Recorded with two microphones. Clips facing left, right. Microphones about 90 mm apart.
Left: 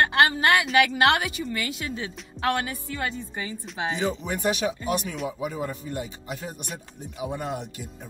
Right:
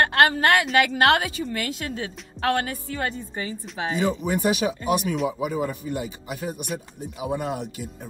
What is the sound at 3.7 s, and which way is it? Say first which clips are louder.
Speech: right 2 dB; centre (ahead or behind).